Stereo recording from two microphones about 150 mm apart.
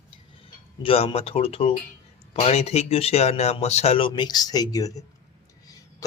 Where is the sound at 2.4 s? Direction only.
45° left (ahead or behind).